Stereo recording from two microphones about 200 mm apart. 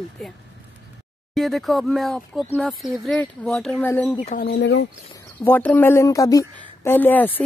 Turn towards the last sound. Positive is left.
turn(degrees=10)  # may be behind; listen again after turning